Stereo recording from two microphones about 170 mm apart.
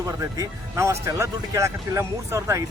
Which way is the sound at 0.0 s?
20° right (ahead or behind).